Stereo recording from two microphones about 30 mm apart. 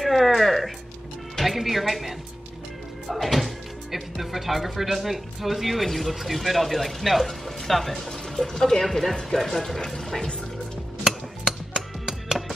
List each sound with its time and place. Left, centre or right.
0.0 s music: centre
1.4 s speech: centre
11.1 s music: centre